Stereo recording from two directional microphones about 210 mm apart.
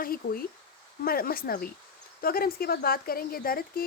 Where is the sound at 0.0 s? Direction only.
45° left (ahead or behind).